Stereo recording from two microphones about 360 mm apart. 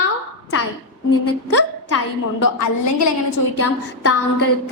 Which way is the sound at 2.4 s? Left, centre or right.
Left.